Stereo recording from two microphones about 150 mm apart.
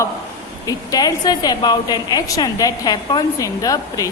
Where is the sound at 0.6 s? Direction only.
25° left (ahead or behind).